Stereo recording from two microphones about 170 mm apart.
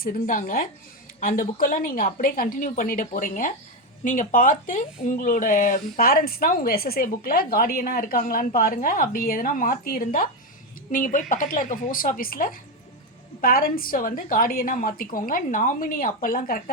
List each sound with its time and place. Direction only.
0.0 s speech: 55° left (ahead or behind)